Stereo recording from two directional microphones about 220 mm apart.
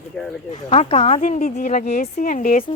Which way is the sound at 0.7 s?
25° left (ahead or behind).